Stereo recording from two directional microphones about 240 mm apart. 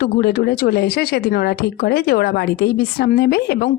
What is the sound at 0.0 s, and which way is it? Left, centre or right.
Speech, left.